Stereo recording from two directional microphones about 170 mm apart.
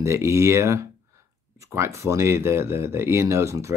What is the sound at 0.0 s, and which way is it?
Speech, 15° right (ahead or behind).